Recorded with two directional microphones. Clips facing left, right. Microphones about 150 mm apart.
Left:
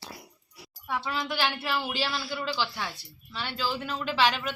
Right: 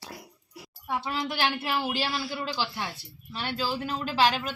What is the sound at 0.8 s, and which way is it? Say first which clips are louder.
Speech: right 1 dB; 20° right (ahead or behind).